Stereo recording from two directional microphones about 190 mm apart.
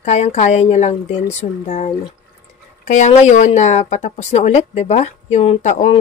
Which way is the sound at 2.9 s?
35° left (ahead or behind).